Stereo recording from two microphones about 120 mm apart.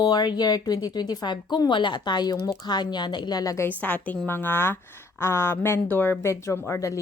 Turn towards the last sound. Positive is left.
turn(degrees=25)  # may be behind; listen again after turning